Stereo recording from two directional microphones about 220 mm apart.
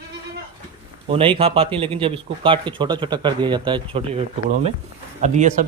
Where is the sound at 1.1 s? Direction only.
25° right (ahead or behind).